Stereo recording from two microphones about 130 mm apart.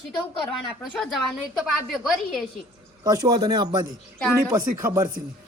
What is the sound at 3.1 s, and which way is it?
A man's voice, 30° right (ahead or behind).